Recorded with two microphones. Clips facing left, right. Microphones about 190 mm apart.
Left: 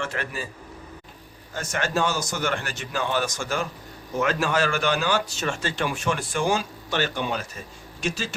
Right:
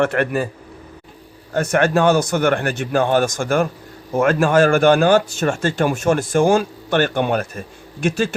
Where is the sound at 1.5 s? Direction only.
60° right (ahead or behind).